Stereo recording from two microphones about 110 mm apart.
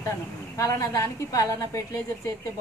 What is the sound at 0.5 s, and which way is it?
A woman's voice, 30° left (ahead or behind).